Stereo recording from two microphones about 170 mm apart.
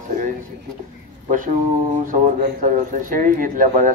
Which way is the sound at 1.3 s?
50° right (ahead or behind).